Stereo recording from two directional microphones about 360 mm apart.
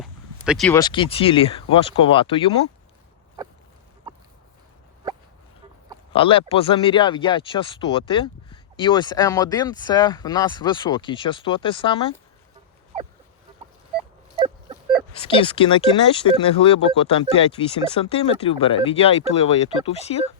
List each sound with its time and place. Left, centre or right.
0.0 s speech: centre
6.1 s speech: centre
15.3 s speech: centre